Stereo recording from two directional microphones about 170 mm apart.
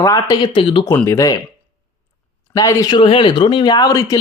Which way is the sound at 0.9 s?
15° left (ahead or behind).